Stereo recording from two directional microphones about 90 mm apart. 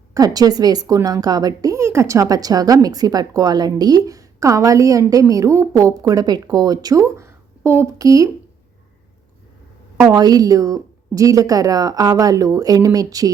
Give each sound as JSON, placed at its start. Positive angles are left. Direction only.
{"t": 0.1, "sound": "a woman's voice", "side_deg": -45}
{"t": 7.9, "sound": "a woman's voice", "side_deg": -40}
{"t": 10.1, "sound": "a woman's voice", "side_deg": -45}